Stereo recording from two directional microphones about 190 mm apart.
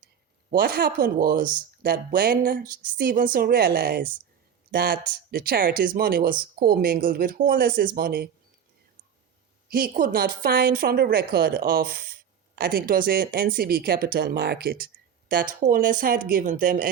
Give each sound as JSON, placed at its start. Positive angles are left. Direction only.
{"t": 0.5, "sound": "speech", "side_deg": -55}
{"t": 9.6, "sound": "speech", "side_deg": -50}